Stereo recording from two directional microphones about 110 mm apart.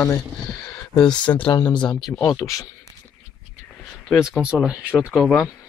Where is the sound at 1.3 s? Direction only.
30° left (ahead or behind).